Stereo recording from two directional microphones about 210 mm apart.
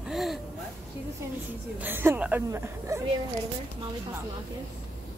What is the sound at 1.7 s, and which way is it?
A woman's voice, 10° right (ahead or behind).